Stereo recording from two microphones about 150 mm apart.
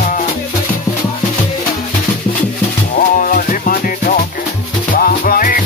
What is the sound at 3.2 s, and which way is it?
Music, 65° left (ahead or behind).